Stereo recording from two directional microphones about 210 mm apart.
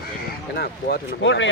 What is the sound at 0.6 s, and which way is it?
Speech, 55° left (ahead or behind).